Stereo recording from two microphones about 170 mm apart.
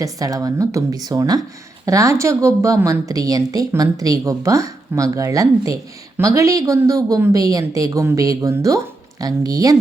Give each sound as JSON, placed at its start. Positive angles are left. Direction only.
{"t": 0.0, "sound": "speech", "side_deg": -20}